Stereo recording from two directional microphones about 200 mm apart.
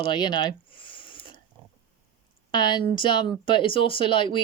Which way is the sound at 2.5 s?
20° left (ahead or behind).